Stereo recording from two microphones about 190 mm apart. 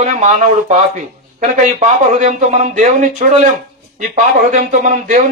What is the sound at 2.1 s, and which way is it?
Speech, 40° right (ahead or behind).